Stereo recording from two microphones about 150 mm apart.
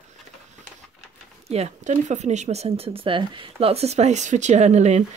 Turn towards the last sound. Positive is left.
turn(degrees=-50)  # may be behind; listen again after turning